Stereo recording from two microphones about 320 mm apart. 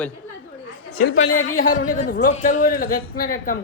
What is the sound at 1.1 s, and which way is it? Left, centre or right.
Speech, left.